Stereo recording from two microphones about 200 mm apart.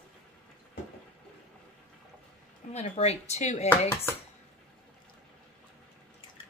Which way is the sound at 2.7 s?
35° left (ahead or behind).